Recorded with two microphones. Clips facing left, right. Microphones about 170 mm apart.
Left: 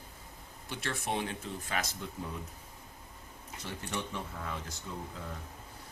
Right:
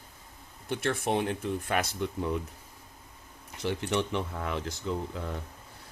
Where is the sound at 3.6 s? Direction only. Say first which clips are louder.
Right 10 dB; 80° right.